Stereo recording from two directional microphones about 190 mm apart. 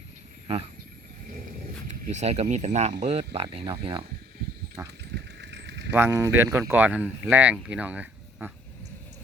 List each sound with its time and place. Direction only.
2.0 s speech: 35° right (ahead or behind)
4.8 s speech: 5° right (ahead or behind)
5.1 s a sound: 65° right (ahead or behind)
5.9 s speech: 15° right (ahead or behind)